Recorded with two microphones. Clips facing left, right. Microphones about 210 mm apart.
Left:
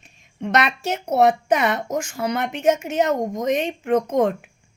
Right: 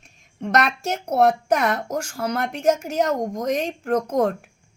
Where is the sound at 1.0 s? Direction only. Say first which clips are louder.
Left 1 dB; 5° left (ahead or behind).